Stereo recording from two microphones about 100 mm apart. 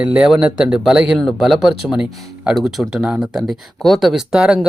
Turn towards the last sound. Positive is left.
turn(degrees=-5)  # may be behind; listen again after turning